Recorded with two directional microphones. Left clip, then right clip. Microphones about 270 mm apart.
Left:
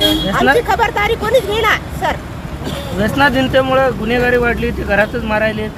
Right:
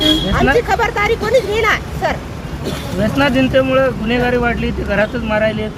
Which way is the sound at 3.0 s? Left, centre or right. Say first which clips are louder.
Left 2 dB; left.